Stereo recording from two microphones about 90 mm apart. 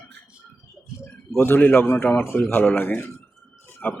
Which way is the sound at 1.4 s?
25° left (ahead or behind).